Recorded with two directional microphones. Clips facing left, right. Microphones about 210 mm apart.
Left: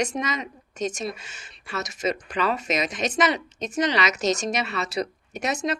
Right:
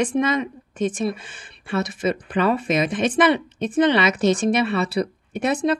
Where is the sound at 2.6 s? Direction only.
55° right (ahead or behind).